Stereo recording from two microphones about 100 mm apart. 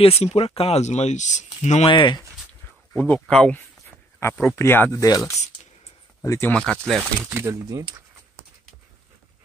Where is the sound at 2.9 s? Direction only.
20° left (ahead or behind).